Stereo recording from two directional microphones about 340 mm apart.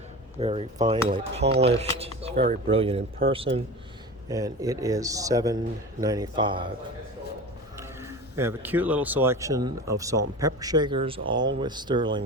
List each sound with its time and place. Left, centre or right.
0.3 s speech: centre
4.3 s speech: centre
7.8 s speech: centre